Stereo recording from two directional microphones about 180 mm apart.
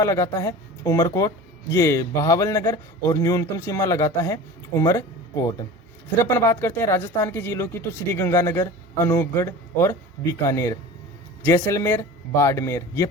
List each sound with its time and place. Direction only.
0.0 s speech: 15° left (ahead or behind)